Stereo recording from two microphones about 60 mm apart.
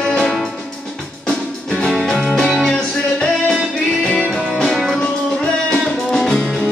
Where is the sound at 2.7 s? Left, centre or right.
Centre.